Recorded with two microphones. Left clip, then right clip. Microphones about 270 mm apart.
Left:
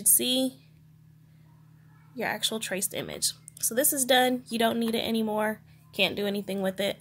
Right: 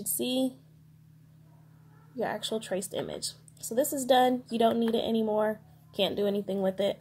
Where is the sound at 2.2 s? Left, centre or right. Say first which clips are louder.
Left 2 dB; left.